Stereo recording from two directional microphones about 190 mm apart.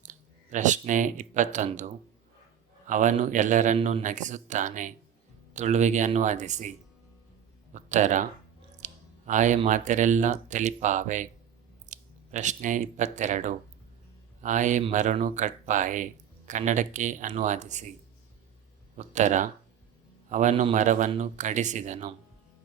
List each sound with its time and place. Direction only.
0.0 s a man's voice: 40° right (ahead or behind)
8.8 s clicking: 40° right (ahead or behind)
9.6 s a man's voice: 40° right (ahead or behind)
18.9 s a man's voice: 40° right (ahead or behind)